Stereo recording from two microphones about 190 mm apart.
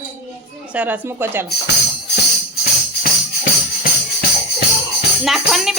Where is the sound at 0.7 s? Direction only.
10° right (ahead or behind).